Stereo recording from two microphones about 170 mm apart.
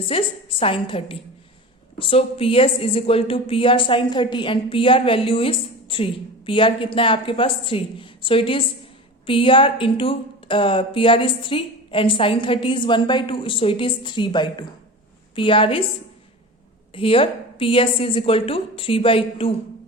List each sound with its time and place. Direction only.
0.0 s a woman's voice: 35° left (ahead or behind)
16.9 s a woman's voice: 30° left (ahead or behind)